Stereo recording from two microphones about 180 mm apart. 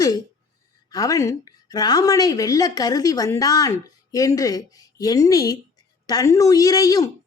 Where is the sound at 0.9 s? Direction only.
20° left (ahead or behind).